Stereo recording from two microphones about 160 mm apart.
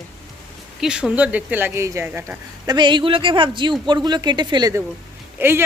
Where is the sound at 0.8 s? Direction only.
5° right (ahead or behind).